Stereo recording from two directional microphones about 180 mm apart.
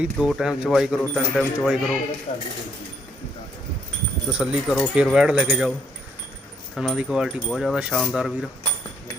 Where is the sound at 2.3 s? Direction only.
30° left (ahead or behind).